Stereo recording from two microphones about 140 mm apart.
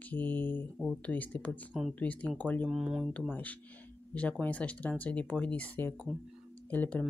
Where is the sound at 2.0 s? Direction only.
10° left (ahead or behind).